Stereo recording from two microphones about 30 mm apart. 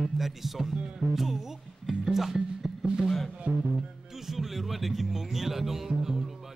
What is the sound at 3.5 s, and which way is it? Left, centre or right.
Music, right.